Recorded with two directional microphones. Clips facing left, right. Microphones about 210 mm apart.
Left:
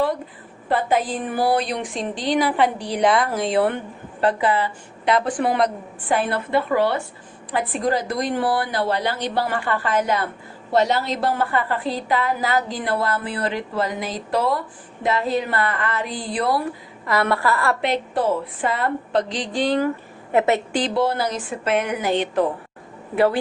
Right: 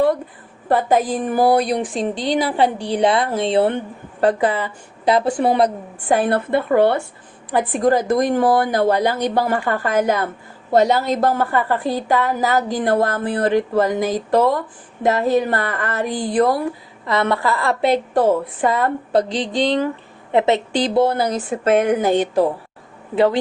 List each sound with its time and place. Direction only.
0.7 s a woman's voice: 45° right (ahead or behind); by 3.8 s 25° right (ahead or behind)
4.2 s a woman's voice: 45° right (ahead or behind)
5.0 s a woman's voice: 30° right (ahead or behind)
6.1 s a woman's voice: 50° right (ahead or behind)
17.1 s a woman's voice: 20° right (ahead or behind)
17.7 s a woman's voice: 40° right (ahead or behind)
19.6 s a woman's voice: 20° right (ahead or behind)
20.8 s a woman's voice: 50° right (ahead or behind)
23.1 s a woman's voice: 20° right (ahead or behind)